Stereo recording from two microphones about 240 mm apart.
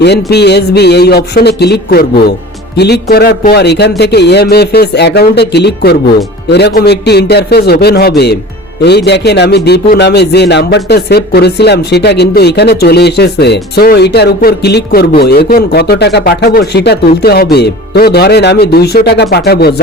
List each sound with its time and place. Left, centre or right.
0.0 s speech: left